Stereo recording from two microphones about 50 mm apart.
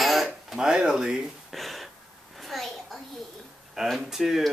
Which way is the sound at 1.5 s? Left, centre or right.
Centre.